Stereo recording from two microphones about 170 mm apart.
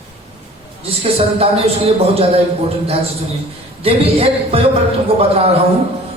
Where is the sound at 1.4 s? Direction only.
35° right (ahead or behind).